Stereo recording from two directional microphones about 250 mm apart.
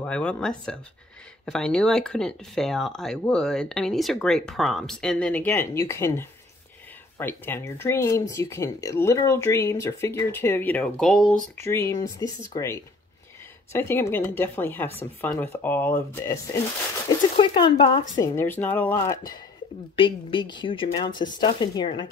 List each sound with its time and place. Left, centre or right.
0.0 s speech: centre
11.6 s speech: centre
17.4 s a woman's voice: left